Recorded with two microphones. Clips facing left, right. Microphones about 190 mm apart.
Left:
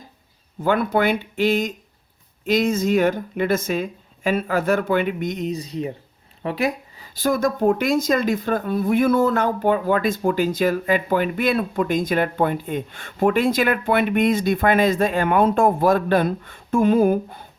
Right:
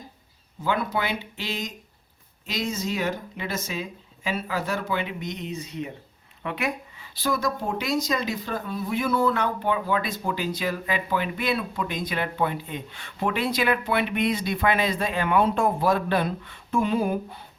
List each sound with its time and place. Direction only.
0.6 s speech: 55° left (ahead or behind)